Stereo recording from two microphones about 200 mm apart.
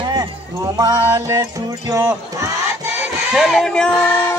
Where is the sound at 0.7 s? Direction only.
15° right (ahead or behind).